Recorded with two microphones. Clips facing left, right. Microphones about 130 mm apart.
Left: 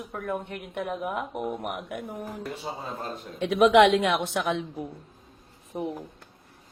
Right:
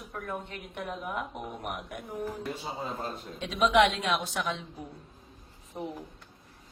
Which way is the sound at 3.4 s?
60° left (ahead or behind).